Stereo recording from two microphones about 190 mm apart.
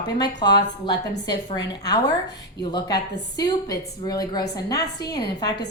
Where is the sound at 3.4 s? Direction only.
20° left (ahead or behind).